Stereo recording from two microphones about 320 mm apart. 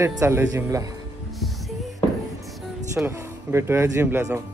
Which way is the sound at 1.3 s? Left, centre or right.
Centre.